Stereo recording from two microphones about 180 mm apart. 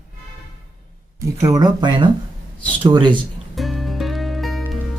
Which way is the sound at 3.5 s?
Centre (ahead or behind).